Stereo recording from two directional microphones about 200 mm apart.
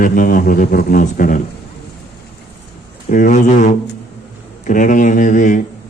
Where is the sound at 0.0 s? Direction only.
45° left (ahead or behind).